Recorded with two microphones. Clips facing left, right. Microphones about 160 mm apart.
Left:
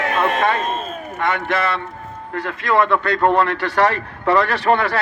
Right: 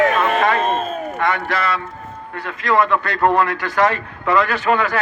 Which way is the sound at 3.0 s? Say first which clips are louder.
Even; 30° left (ahead or behind).